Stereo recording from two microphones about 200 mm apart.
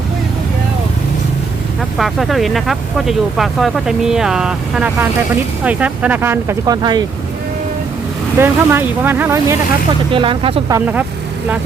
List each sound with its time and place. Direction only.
2.0 s speech: centre (ahead or behind); by 7.0 s 20° right (ahead or behind)
8.4 s speech: 10° right (ahead or behind)
10.1 s speech: 25° right (ahead or behind)
10.8 s speech: 10° right (ahead or behind)